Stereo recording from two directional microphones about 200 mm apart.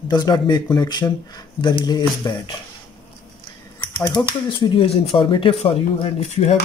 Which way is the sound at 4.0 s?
20° left (ahead or behind).